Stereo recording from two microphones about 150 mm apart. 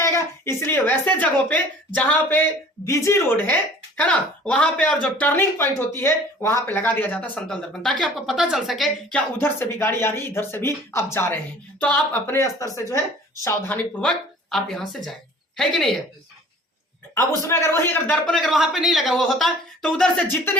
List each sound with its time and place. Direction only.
0.0 s speech: 15° left (ahead or behind); by 9.2 s centre (ahead or behind)
9.4 s a woman's voice: 15° left (ahead or behind)
17.2 s a man's voice: 20° left (ahead or behind)
20.2 s speech: 15° left (ahead or behind)